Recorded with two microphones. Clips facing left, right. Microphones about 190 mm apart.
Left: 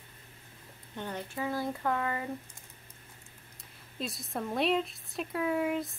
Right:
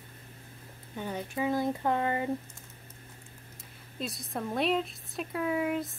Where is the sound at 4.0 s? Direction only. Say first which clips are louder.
Right 1 dB; centre (ahead or behind).